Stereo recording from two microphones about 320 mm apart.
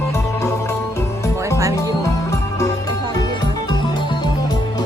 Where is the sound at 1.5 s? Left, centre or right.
Centre.